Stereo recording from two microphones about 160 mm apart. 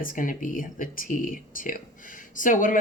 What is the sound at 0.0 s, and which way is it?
Speech, 60° left (ahead or behind).